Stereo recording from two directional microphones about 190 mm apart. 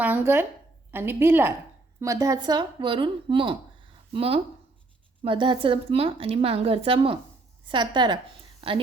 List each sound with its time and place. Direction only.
0.0 s a woman's voice: 10° right (ahead or behind); by 8.8 s 30° right (ahead or behind)